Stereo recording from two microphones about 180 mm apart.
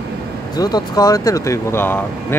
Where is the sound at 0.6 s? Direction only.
20° left (ahead or behind).